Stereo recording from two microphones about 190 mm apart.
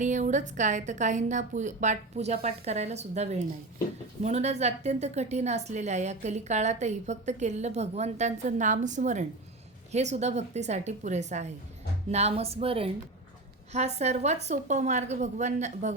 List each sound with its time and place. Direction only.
0.0 s a woman's voice: 40° right (ahead or behind)